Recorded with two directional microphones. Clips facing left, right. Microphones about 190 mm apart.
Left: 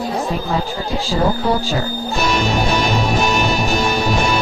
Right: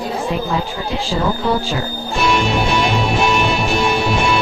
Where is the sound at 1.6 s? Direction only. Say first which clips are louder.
Left 2 dB; 40° left (ahead or behind).